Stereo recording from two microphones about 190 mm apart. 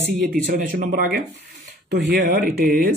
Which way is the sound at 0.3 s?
50° right (ahead or behind).